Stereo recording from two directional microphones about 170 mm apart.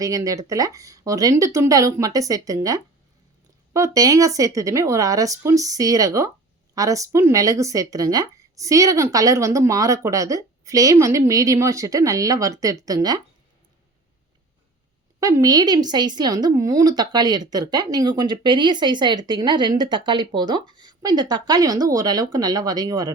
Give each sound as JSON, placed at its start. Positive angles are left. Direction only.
{"t": 0.0, "sound": "speech", "side_deg": -20}
{"t": 15.2, "sound": "speech", "side_deg": -20}